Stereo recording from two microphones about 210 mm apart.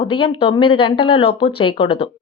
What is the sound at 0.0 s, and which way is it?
Speech, 25° left (ahead or behind).